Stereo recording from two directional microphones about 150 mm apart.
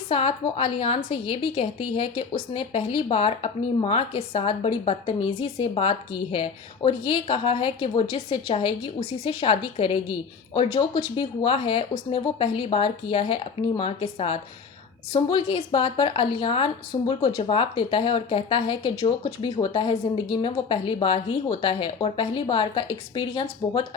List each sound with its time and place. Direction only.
0.1 s a woman's voice: 40° left (ahead or behind)